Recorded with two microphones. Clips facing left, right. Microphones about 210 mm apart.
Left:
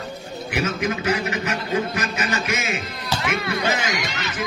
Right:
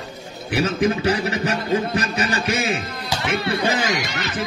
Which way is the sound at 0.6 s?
30° right (ahead or behind).